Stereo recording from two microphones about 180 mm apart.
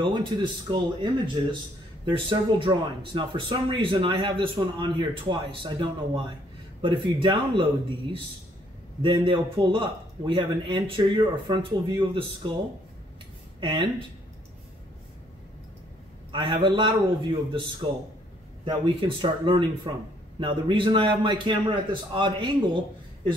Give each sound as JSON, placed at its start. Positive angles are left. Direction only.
{"t": 0.0, "sound": "speech", "side_deg": -25}
{"t": 2.0, "sound": "speech", "side_deg": -30}
{"t": 13.6, "sound": "speech", "side_deg": -25}
{"t": 16.3, "sound": "speech", "side_deg": -25}